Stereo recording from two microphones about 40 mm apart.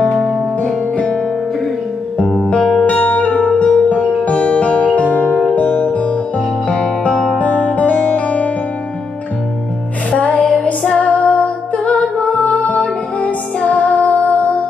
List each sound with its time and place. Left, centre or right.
0.6 s music: left
2.4 s music: left
2.9 s music: left
7.3 s music: left
10.1 s music: left